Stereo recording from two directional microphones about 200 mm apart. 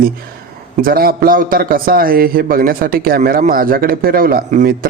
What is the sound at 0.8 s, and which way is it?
A man's voice, 45° right (ahead or behind).